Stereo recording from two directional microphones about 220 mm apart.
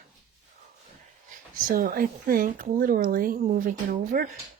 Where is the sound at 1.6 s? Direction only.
40° right (ahead or behind).